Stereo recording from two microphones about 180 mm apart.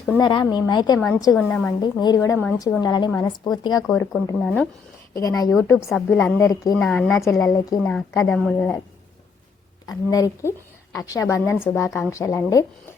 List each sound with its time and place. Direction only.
0.2 s a woman's voice: 25° left (ahead or behind)
1.8 s a woman's voice: 25° left (ahead or behind)
4.1 s speech: 5° left (ahead or behind)
5.1 s a woman's voice: 20° left (ahead or behind)
6.7 s speech: 5° left (ahead or behind)
7.5 s a woman's voice: 20° left (ahead or behind)
9.8 s a woman's voice: 20° left (ahead or behind)